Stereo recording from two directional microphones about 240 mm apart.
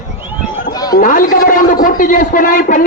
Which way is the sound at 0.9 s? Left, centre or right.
Left.